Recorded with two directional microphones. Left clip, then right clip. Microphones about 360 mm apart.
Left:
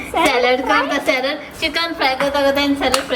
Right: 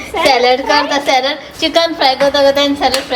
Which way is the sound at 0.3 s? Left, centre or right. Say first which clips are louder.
Right 6 dB; centre.